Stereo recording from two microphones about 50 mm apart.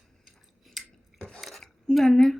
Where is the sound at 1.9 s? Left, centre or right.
Centre.